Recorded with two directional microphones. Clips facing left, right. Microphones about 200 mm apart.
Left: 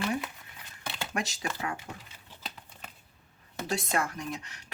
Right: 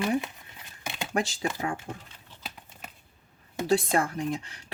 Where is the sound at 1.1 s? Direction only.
30° right (ahead or behind).